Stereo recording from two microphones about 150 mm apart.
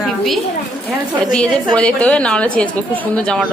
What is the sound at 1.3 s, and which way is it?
A woman's voice, 5° left (ahead or behind).